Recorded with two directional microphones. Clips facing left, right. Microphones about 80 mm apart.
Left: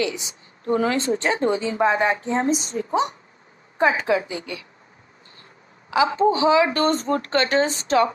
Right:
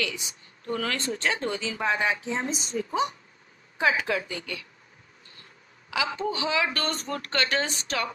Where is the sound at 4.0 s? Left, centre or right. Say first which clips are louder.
Left 7 dB; centre.